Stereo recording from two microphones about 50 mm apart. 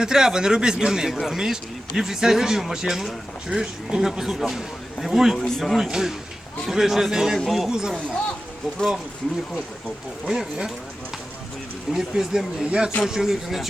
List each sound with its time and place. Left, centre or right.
0.0 s speech: centre
5.4 s speech: centre
5.7 s speech: centre
7.7 s speech: centre
10.2 s speech: centre
11.9 s speech: centre